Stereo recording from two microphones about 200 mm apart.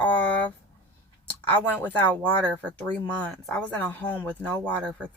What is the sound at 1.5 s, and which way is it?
Speech, 10° left (ahead or behind).